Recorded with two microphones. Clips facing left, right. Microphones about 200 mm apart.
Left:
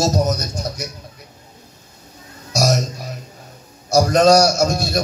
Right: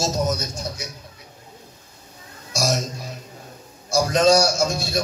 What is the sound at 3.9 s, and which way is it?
A man's voice, 40° left (ahead or behind).